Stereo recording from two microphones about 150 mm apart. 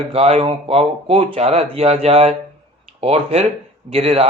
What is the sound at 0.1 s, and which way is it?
A man's voice, 40° right (ahead or behind).